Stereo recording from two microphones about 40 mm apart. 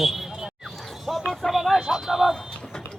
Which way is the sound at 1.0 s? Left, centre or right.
Centre.